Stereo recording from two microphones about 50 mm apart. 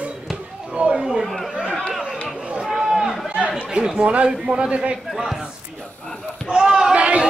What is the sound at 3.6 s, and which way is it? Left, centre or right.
Chatter, centre.